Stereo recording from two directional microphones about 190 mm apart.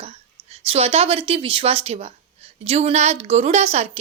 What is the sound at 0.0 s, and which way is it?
A woman's voice, 30° right (ahead or behind).